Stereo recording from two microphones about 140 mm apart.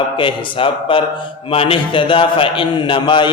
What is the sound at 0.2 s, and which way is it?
A man's voice, 40° left (ahead or behind).